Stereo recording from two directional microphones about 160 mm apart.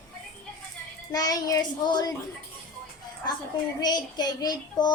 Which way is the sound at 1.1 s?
25° left (ahead or behind).